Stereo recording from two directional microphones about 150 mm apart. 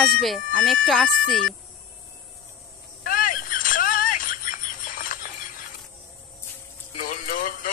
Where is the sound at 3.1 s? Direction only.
65° left (ahead or behind).